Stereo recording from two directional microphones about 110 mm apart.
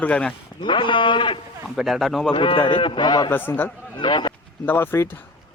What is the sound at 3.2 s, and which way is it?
Speech, 20° left (ahead or behind).